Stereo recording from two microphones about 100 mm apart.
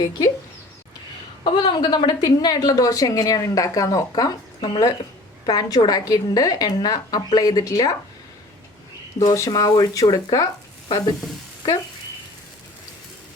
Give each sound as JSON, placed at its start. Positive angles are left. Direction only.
{"t": 0.0, "sound": "speech", "side_deg": 40}
{"t": 1.5, "sound": "a woman's voice", "side_deg": 50}
{"t": 9.2, "sound": "a woman's voice", "side_deg": 35}
{"t": 10.8, "sound": "stir", "side_deg": 45}